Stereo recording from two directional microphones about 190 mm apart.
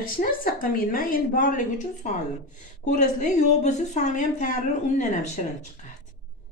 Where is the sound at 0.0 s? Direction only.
45° left (ahead or behind).